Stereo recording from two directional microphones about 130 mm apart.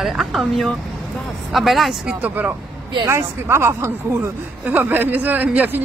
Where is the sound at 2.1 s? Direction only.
10° right (ahead or behind).